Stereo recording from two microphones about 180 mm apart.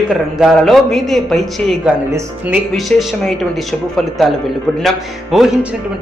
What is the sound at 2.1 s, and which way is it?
Speech, 15° right (ahead or behind).